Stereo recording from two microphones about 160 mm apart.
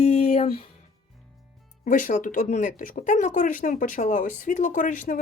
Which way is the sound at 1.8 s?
55° left (ahead or behind).